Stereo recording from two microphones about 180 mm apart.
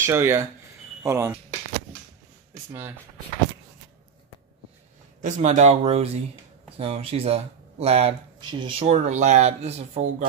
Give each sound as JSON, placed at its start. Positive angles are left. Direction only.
{"t": 0.0, "sound": "speech", "side_deg": -15}
{"t": 5.2, "sound": "speech", "side_deg": -40}